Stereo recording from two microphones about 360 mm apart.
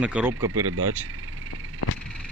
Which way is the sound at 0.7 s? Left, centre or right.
Right.